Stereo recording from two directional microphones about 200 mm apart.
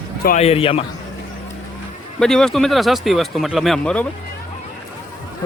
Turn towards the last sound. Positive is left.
turn(degrees=5)  # may be behind; listen again after turning